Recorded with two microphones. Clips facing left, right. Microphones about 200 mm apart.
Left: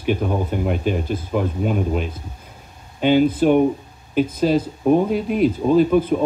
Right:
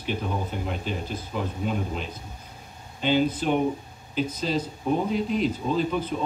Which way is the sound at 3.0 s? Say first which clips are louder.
Left 8 dB; 55° left (ahead or behind).